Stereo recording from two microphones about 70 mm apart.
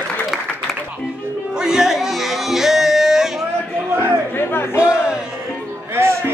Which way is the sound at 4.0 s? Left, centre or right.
Left.